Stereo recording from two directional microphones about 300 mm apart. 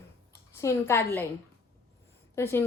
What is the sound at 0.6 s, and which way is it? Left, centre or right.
Speech, centre.